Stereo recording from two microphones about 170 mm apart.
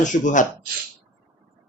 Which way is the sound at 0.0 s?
50° left (ahead or behind).